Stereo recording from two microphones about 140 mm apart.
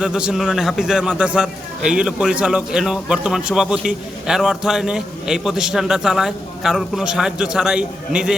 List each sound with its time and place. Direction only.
0.0 s a man's voice: 5° right (ahead or behind)